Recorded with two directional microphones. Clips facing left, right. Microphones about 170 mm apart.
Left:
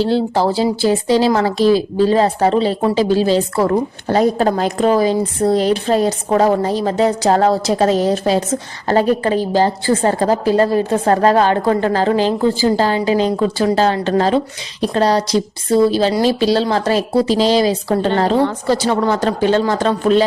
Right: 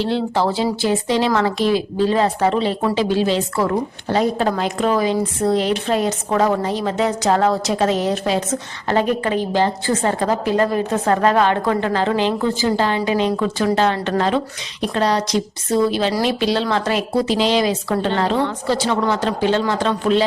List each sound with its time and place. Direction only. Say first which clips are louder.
0.0 s a woman's voice: left 4 dB; 35° left (ahead or behind)